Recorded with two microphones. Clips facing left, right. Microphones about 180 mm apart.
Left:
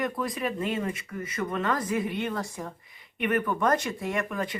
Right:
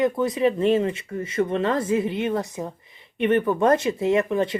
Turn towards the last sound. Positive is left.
turn(degrees=-25)  # may be behind; listen again after turning